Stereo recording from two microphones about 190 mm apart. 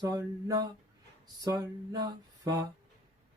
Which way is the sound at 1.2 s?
20° right (ahead or behind).